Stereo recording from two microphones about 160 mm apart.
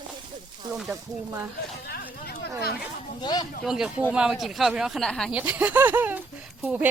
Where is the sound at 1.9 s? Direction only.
85° left.